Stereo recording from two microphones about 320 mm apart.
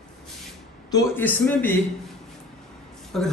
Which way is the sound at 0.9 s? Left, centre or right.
Centre.